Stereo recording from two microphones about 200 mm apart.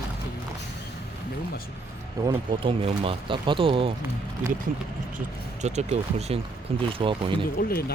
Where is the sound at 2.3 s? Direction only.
25° right (ahead or behind).